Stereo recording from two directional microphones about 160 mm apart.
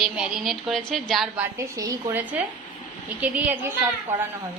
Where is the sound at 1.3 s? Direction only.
15° right (ahead or behind).